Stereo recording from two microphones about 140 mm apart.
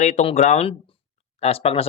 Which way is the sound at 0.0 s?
55° left (ahead or behind).